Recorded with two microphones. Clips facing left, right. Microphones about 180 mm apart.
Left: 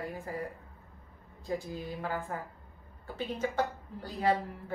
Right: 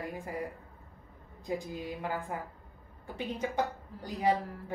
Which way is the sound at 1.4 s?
15° right (ahead or behind).